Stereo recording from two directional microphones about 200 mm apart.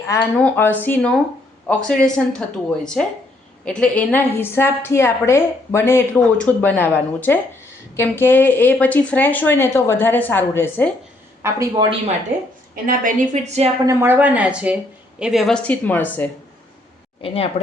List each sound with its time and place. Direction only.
0.1 s a woman's voice: 10° left (ahead or behind)
11.4 s speech: 15° right (ahead or behind)
12.7 s a woman's voice: 45° right (ahead or behind)
13.8 s a woman's voice: 10° right (ahead or behind); by 16.3 s 10° left (ahead or behind)
17.2 s speech: 30° left (ahead or behind)